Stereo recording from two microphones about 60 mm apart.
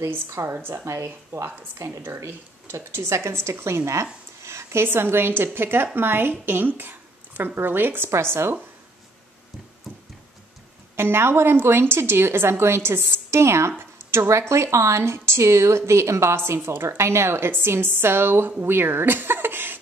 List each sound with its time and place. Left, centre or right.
0.1 s a woman's voice: right
0.8 s a woman's voice: right
11.0 s a woman's voice: right